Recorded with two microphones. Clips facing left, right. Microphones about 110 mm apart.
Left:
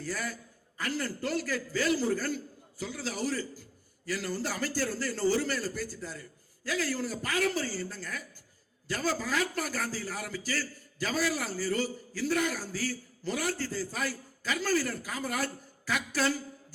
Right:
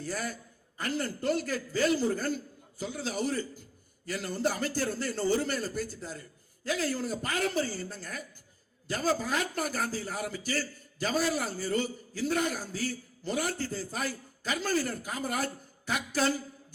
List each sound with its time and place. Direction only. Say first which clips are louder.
0.0 s a man's voice: right 1 dB; 25° right (ahead or behind)